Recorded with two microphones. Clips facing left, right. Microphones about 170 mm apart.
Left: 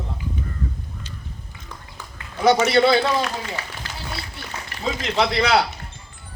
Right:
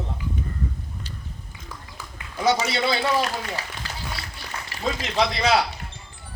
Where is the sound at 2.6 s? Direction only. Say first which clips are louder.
Left 8 dB; 60° left (ahead or behind).